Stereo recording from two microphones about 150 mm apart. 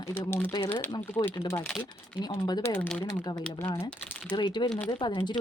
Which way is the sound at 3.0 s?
30° left (ahead or behind).